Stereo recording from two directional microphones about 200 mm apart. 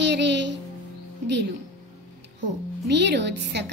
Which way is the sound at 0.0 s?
60° right (ahead or behind).